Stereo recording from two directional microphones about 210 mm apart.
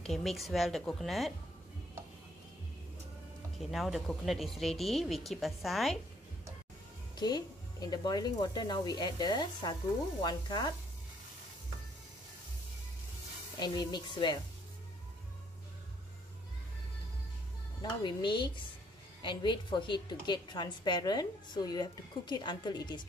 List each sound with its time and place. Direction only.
0.0 s speech: centre (ahead or behind)
3.5 s speech: centre (ahead or behind)
7.2 s a woman's voice: 20° left (ahead or behind)
13.6 s a woman's voice: 20° left (ahead or behind)
18.0 s a woman's voice: 20° left (ahead or behind)